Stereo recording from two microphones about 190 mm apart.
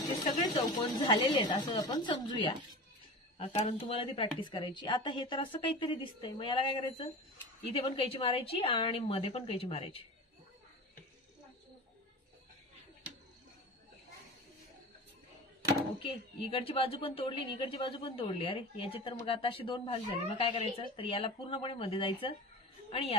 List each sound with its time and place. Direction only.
0.7 s a woman's voice: 20° left (ahead or behind)
16.0 s a woman's voice: 30° left (ahead or behind)